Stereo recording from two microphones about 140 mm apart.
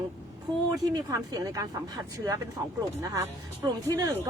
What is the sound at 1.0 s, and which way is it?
Speech, 25° right (ahead or behind).